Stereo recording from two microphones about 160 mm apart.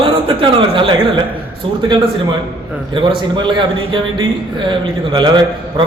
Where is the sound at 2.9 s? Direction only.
30° right (ahead or behind).